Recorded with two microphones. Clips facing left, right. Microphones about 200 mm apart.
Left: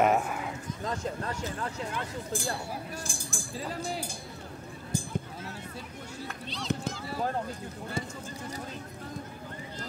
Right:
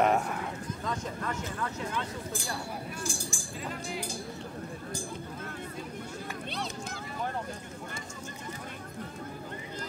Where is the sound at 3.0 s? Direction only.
55° left (ahead or behind).